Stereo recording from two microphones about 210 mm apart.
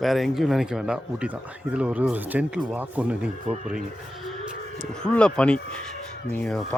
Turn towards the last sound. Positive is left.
turn(degrees=10)  # may be behind; listen again after turning